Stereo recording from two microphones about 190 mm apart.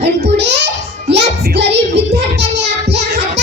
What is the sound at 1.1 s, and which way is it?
Music, 60° right (ahead or behind).